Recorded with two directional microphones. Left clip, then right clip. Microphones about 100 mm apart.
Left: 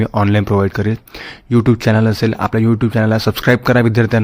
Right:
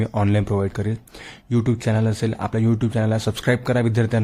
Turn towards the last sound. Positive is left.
turn(degrees=30)  # may be behind; listen again after turning